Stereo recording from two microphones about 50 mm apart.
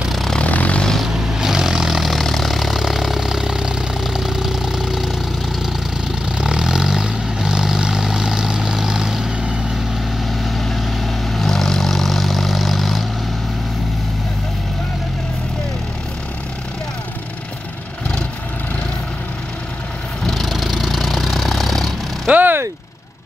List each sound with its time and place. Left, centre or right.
0.1 s vehicle: centre
0.4 s vehicle: left
1.0 s vehicle: centre
6.2 s vehicle: centre
10.4 s vehicle: centre
20.2 s vehicle: centre
22.3 s a sound: right